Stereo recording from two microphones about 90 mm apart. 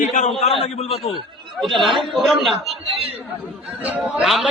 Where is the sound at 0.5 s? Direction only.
90° left.